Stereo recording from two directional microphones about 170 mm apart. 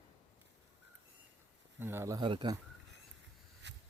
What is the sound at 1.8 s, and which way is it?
Speech, 15° right (ahead or behind).